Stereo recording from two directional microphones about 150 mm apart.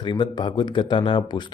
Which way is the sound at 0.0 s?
30° left (ahead or behind).